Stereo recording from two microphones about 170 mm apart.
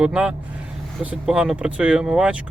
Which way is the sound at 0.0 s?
5° right (ahead or behind).